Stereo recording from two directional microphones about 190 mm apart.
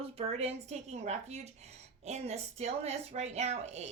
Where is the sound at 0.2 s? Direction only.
35° right (ahead or behind).